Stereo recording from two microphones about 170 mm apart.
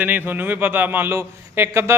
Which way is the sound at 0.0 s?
10° right (ahead or behind).